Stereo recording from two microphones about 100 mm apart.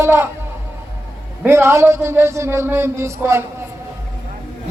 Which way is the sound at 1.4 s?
25° right (ahead or behind).